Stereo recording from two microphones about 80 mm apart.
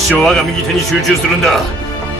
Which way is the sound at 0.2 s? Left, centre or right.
Centre.